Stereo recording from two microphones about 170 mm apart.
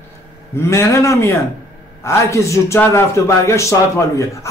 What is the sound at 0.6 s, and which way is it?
A man's voice, 15° left (ahead or behind).